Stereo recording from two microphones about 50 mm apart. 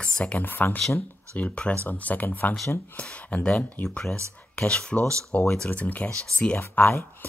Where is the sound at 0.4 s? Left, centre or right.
Left.